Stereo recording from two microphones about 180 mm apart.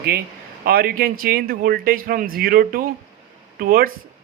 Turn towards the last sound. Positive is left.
turn(degrees=-50)  # may be behind; listen again after turning